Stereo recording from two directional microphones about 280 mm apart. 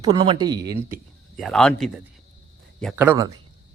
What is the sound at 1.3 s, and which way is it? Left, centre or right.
A man's voice, centre.